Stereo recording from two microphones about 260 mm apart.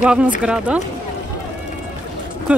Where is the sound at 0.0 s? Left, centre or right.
Centre.